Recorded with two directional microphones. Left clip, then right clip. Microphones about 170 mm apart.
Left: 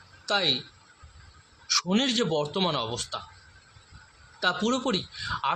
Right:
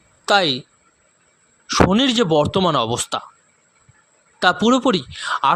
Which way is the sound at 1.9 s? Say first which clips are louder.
Right 10 dB; 60° right (ahead or behind).